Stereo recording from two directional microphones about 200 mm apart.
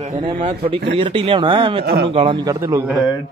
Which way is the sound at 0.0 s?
35° right (ahead or behind).